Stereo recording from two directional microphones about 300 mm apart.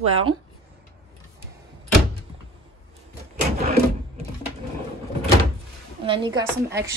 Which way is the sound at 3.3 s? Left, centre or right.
Right.